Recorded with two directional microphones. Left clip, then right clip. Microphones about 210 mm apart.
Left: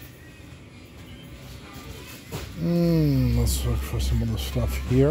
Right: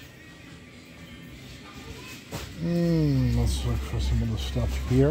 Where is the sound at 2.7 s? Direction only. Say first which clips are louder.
Left 3 dB; centre (ahead or behind).